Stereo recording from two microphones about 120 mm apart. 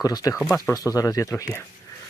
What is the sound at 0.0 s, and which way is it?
Speech, 30° left (ahead or behind).